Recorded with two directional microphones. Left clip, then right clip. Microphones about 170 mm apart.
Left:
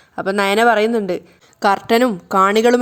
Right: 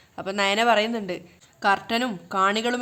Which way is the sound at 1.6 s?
45° left (ahead or behind).